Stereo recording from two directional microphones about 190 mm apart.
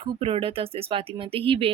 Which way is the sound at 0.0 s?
30° right (ahead or behind).